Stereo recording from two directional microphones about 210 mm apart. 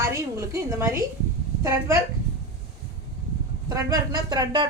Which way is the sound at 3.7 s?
15° right (ahead or behind).